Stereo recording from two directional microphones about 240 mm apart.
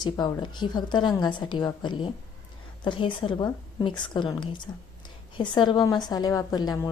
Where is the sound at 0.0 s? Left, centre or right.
Centre.